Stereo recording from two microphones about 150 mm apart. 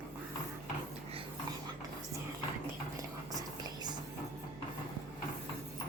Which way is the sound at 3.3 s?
25° right (ahead or behind).